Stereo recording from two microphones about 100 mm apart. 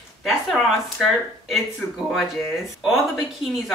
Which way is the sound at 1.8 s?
20° left (ahead or behind).